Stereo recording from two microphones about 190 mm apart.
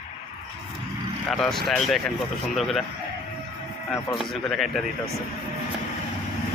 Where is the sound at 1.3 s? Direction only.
Centre (ahead or behind).